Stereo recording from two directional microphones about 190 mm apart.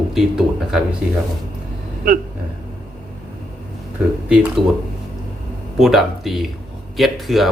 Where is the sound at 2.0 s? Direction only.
50° right (ahead or behind).